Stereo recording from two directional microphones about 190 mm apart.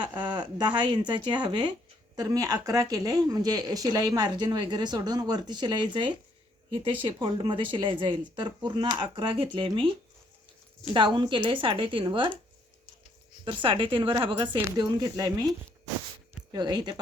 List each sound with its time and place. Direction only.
0.0 s speech: 25° right (ahead or behind)
10.9 s speech: 25° right (ahead or behind)
13.4 s speech: 25° right (ahead or behind)